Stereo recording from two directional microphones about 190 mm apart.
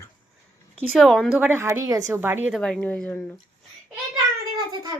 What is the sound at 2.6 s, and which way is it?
Speech, 5° left (ahead or behind).